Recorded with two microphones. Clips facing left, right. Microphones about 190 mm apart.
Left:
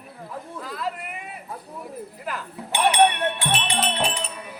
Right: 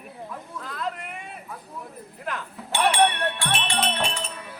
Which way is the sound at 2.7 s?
20° left (ahead or behind).